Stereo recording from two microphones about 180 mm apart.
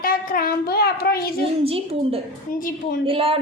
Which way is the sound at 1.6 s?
35° right (ahead or behind).